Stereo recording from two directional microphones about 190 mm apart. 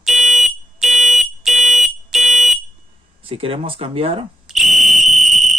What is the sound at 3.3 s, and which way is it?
Speech, 30° right (ahead or behind).